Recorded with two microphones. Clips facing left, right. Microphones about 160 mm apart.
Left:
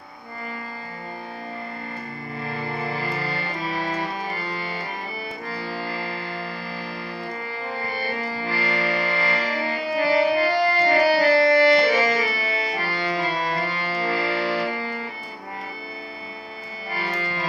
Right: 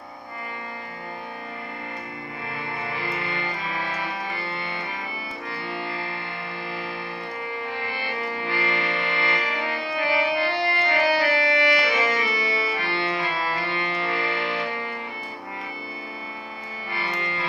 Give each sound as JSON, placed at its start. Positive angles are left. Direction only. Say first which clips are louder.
{"t": 2.4, "sound": "music", "louder": "left 5 dB", "side_deg": 35}
{"t": 7.7, "sound": "music", "louder": "left 2 dB", "side_deg": 40}
{"t": 16.9, "sound": "music", "louder": "left 2 dB", "side_deg": 40}